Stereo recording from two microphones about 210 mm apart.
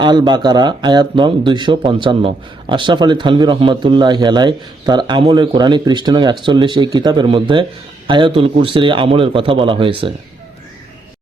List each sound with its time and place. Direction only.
0.0 s speech: 20° right (ahead or behind)